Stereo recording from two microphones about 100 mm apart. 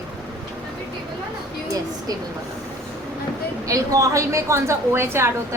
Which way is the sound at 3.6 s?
35° right (ahead or behind).